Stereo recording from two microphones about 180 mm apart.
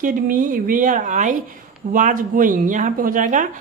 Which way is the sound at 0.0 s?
45° right (ahead or behind).